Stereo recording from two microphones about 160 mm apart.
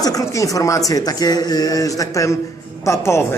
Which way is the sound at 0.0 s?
20° left (ahead or behind).